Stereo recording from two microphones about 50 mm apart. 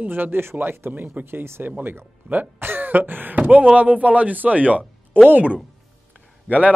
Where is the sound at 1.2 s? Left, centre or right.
Right.